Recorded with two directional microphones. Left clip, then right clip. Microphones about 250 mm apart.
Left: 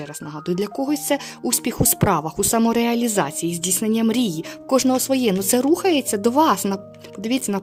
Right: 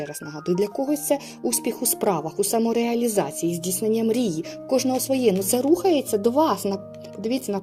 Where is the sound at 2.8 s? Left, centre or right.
Left.